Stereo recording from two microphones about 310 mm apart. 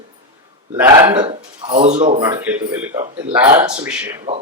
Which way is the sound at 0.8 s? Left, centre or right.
Centre.